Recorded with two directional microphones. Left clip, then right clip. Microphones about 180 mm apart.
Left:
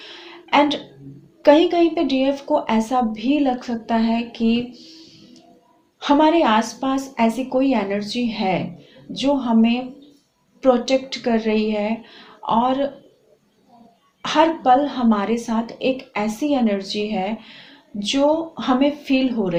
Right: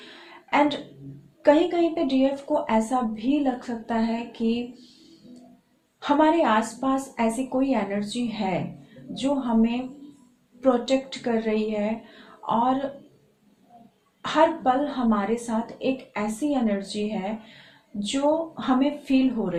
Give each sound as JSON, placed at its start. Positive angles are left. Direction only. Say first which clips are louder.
{"t": 0.5, "sound": "a sound", "louder": "left 5 dB", "side_deg": 35}
{"t": 1.4, "sound": "a woman's voice", "louder": "left 6 dB", "side_deg": 35}
{"t": 6.0, "sound": "a woman's voice", "louder": "left 5 dB", "side_deg": 35}
{"t": 14.2, "sound": "a woman's voice", "louder": "left 3 dB", "side_deg": 35}